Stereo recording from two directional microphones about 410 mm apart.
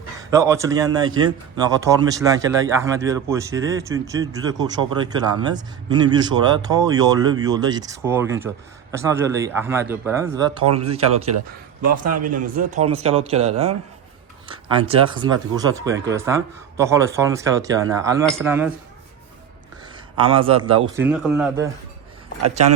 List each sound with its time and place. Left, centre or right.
0.2 s a man's voice: centre
11.3 s speech: right
12.2 s a man's voice: centre
20.1 s a man's voice: centre